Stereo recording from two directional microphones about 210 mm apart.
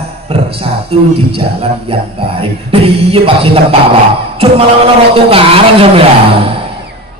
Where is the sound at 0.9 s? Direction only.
30° right (ahead or behind).